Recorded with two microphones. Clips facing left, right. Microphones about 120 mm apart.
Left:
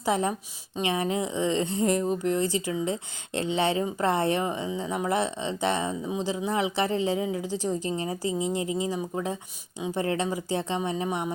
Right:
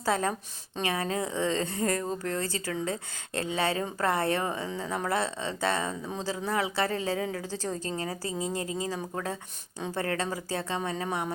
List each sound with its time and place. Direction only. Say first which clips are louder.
0.0 s a woman's voice: left 2 dB; 15° left (ahead or behind)